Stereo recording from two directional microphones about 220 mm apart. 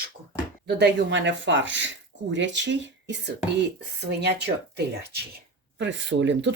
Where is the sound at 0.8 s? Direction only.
55° right (ahead or behind).